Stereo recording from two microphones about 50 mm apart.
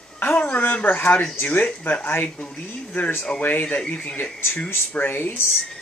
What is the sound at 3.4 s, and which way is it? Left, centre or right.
Speech, left.